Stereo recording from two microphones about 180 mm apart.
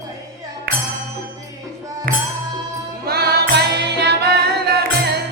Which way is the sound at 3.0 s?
60° right (ahead or behind).